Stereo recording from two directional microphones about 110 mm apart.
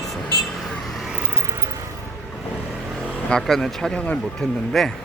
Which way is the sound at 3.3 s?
5° left (ahead or behind).